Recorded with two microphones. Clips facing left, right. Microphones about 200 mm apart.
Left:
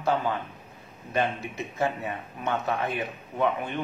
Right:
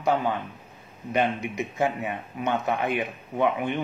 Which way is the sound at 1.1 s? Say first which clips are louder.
Right 3 dB; 15° right (ahead or behind).